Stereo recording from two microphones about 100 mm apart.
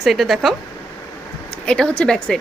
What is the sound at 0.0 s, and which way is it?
Speech, centre (ahead or behind).